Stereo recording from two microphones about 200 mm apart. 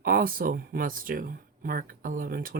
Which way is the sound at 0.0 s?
45° right (ahead or behind).